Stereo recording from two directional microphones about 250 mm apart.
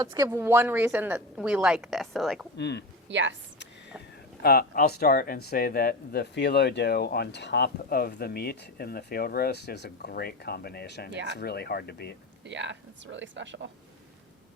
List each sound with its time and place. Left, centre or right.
0.0 s a woman's voice: centre
2.6 s speech: left
3.1 s speech: right
4.4 s speech: left
11.1 s speech: right
11.3 s speech: left
12.5 s speech: right